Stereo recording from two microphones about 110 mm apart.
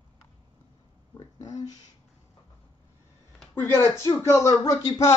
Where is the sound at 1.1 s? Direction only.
35° left (ahead or behind).